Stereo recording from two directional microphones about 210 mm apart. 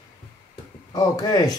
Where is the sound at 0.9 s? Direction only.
15° left (ahead or behind).